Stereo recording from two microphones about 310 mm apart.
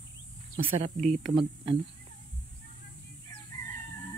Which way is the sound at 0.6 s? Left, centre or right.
Centre.